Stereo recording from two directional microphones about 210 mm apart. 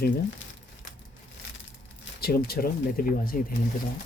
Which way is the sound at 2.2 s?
45° left (ahead or behind).